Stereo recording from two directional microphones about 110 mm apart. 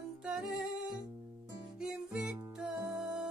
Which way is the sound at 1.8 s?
5° right (ahead or behind).